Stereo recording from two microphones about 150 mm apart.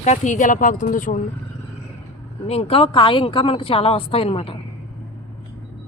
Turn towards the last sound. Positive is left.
turn(degrees=40)  # may be behind; listen again after turning